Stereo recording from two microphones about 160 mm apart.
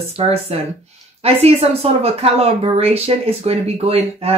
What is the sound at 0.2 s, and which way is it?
Speech, 40° right (ahead or behind).